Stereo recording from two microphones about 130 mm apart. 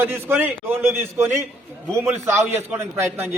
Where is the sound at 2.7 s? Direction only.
15° right (ahead or behind).